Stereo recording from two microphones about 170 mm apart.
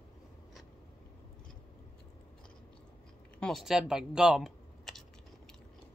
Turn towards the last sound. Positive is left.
turn(degrees=0)  # may be behind; listen again after turning